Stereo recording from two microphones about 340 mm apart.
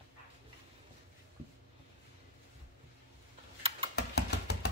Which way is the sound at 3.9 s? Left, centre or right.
Left.